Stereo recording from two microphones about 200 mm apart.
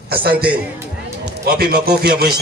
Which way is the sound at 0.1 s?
50° right (ahead or behind).